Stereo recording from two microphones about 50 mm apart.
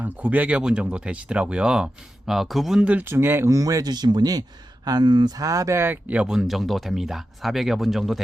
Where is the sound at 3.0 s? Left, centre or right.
Right.